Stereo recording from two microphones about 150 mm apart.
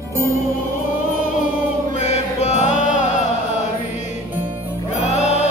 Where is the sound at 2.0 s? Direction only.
50° left (ahead or behind).